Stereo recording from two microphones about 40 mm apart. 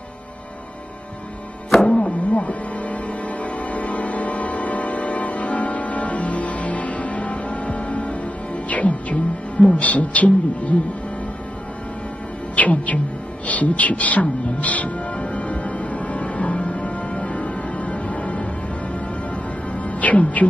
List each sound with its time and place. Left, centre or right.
1.9 s music: left
9.7 s speech: left
12.5 s speech: left
15.1 s music: left